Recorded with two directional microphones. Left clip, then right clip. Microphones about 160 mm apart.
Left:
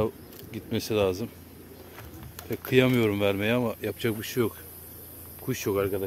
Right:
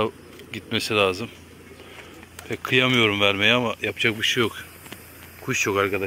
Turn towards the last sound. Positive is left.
turn(degrees=0)  # may be behind; listen again after turning